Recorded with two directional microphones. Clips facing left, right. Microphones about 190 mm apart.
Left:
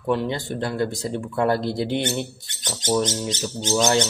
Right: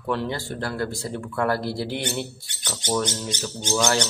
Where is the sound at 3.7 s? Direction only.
20° left (ahead or behind).